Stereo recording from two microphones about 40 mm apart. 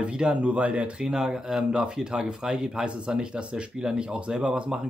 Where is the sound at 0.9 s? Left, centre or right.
Centre.